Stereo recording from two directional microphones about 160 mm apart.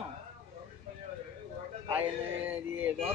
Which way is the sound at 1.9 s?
10° right (ahead or behind).